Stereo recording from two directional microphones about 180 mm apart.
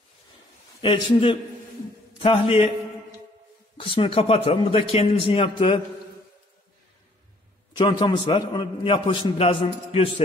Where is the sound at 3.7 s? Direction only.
30° left (ahead or behind).